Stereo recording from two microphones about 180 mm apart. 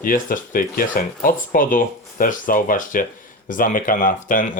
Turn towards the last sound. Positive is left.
turn(degrees=45)  # may be behind; listen again after turning